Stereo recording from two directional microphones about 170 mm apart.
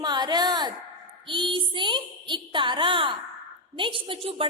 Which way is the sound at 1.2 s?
30° right (ahead or behind).